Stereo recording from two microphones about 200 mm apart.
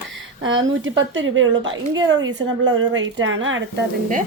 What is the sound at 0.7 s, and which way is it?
Speech, 75° right (ahead or behind).